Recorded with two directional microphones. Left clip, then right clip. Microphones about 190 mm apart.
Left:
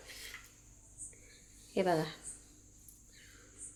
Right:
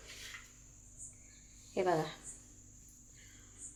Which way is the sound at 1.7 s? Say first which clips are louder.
Left 1 dB; 25° left (ahead or behind).